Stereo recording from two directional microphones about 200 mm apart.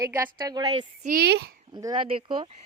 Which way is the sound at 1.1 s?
50° right (ahead or behind).